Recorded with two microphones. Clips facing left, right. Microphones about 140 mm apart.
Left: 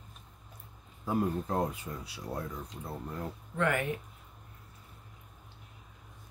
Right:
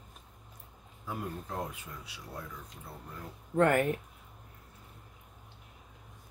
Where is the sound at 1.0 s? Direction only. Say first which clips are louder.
Left 8 dB; 40° left (ahead or behind).